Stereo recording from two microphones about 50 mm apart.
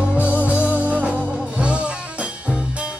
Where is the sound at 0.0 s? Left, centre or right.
Right.